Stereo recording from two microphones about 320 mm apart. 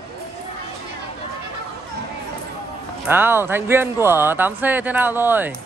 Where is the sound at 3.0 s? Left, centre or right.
Centre.